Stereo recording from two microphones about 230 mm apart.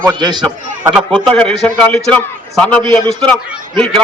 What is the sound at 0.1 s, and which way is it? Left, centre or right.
Speech, centre.